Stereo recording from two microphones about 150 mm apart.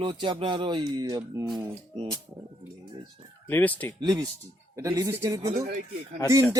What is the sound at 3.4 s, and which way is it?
Speech, 10° left (ahead or behind).